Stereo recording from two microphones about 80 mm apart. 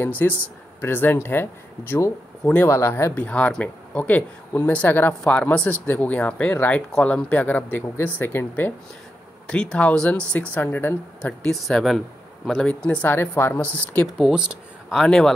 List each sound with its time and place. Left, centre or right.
0.2 s speech: left
2.4 s speech: centre
2.7 s speech: left
3.2 s speech: centre
6.9 s speech: centre
9.5 s speech: centre
10.5 s speech: left
11.4 s speech: centre
12.5 s speech: centre
13.1 s speech: left
14.1 s speech: centre
15.0 s speech: centre